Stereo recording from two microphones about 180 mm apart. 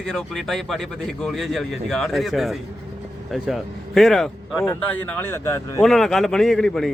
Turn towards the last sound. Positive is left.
turn(degrees=5)  # may be behind; listen again after turning